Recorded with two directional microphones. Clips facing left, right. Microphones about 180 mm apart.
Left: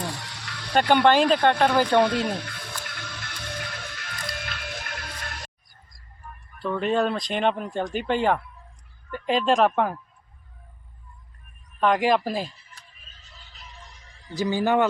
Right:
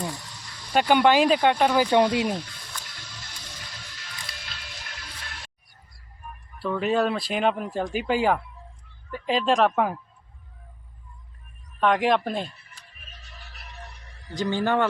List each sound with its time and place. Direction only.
0.0 s a sound: 75° left (ahead or behind)
0.7 s speech: 10° right (ahead or behind)
2.2 s music: 65° left (ahead or behind); by 5.5 s 50° left (ahead or behind)
6.6 s speech: 5° right (ahead or behind)
11.8 s speech: centre (ahead or behind)
12.8 s music: 70° right (ahead or behind)
14.3 s speech: 10° left (ahead or behind)